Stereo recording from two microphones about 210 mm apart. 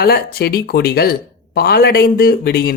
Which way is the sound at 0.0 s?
50° left (ahead or behind).